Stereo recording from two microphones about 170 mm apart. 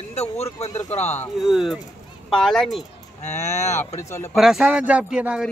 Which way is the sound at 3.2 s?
40° left (ahead or behind).